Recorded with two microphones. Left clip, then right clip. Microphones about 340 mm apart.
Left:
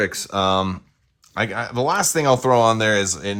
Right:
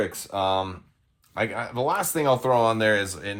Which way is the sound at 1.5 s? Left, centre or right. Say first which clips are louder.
Left 6 dB; left.